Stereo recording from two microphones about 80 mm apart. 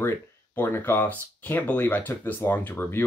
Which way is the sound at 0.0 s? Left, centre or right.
Left.